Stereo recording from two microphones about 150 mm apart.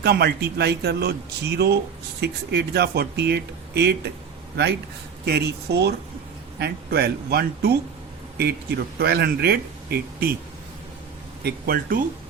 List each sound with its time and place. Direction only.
0.0 s speech: 90° right
5.2 s speech: 90° right
11.4 s speech: 85° right